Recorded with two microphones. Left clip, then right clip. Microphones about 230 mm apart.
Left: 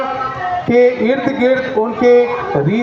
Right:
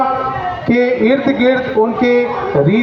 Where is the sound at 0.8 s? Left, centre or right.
Left.